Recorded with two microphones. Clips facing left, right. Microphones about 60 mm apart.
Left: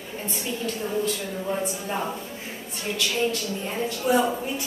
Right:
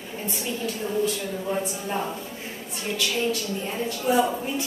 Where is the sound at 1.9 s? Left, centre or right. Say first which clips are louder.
Even; centre.